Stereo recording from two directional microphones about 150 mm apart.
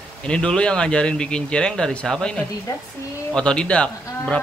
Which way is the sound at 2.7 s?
20° left (ahead or behind).